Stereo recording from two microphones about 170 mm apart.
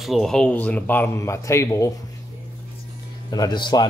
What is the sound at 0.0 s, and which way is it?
Speech, centre (ahead or behind).